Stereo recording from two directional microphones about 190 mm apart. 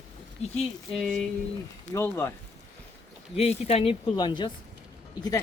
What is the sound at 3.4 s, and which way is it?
Speech, 35° left (ahead or behind).